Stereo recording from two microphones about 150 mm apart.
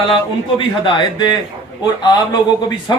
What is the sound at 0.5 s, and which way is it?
A man's voice, 35° left (ahead or behind).